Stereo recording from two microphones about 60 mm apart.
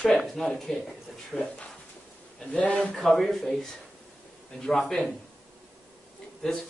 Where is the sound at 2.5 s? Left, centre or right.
Left.